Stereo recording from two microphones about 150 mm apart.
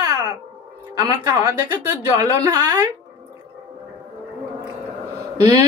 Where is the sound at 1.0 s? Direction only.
25° right (ahead or behind).